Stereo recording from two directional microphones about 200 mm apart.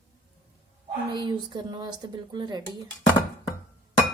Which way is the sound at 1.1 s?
20° right (ahead or behind).